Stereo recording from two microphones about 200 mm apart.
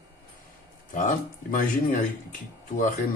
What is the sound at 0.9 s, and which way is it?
Speech, 40° left (ahead or behind).